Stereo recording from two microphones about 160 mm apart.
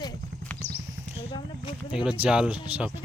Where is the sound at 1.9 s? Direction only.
5° right (ahead or behind).